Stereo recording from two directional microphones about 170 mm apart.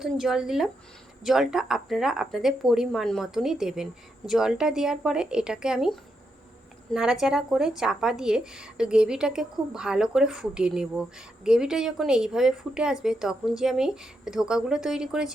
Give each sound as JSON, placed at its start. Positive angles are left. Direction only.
{"t": 0.0, "sound": "speech", "side_deg": 0}
{"t": 6.9, "sound": "speech", "side_deg": -5}